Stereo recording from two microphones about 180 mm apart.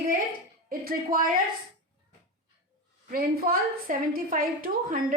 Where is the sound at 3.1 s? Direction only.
55° right (ahead or behind).